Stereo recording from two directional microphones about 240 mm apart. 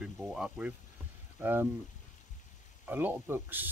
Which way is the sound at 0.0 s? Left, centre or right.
Centre.